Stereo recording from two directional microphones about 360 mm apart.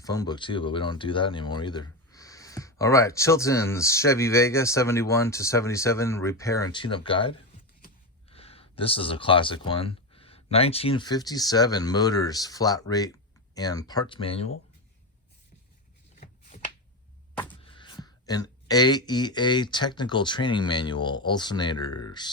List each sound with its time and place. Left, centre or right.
0.0 s speech: centre
16.2 s shuffling cards: left
17.3 s a sound: centre
17.6 s speech: centre